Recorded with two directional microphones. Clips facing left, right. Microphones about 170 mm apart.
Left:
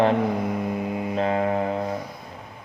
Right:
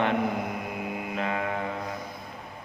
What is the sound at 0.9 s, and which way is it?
Mantra, 30° left (ahead or behind).